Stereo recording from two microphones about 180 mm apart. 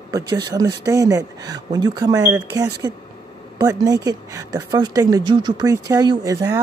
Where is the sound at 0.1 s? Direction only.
20° right (ahead or behind).